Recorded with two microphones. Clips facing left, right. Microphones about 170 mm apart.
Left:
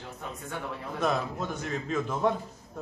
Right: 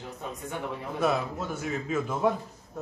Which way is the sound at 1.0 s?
5° right (ahead or behind).